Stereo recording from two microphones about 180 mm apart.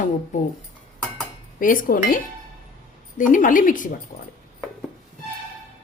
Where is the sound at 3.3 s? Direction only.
45° left (ahead or behind).